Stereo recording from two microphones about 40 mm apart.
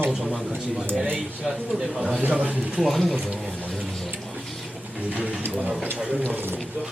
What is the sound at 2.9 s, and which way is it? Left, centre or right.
Speech, centre.